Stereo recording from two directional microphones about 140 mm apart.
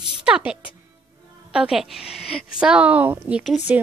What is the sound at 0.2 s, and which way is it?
A woman's voice, 5° right (ahead or behind).